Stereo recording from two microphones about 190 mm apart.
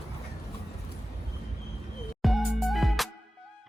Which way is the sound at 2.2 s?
Centre (ahead or behind).